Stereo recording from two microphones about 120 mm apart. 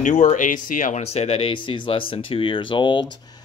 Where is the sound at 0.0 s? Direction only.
90° left.